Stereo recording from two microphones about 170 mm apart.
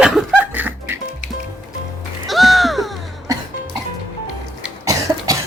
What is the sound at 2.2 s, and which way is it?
Music, centre (ahead or behind).